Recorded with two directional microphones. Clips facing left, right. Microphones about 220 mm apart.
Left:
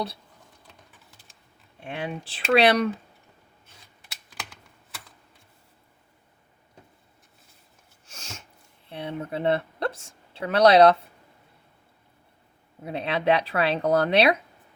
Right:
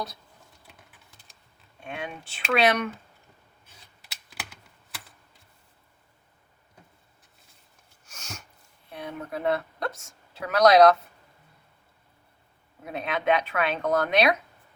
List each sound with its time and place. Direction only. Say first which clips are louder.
1.8 s speech: left 4 dB; 30° left (ahead or behind)
8.0 s a sound: even; 30° left (ahead or behind)
8.9 s speech: left 3 dB; 30° left (ahead or behind)
12.8 s speech: left 3 dB; 30° left (ahead or behind)